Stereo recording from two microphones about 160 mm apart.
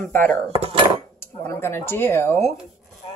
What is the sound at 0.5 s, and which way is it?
Dishes, 40° right (ahead or behind).